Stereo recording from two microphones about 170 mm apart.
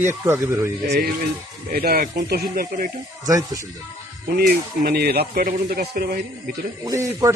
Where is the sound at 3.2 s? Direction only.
20° right (ahead or behind).